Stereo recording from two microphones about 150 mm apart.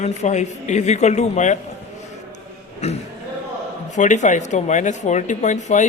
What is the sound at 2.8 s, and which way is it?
Speech, 45° left (ahead or behind).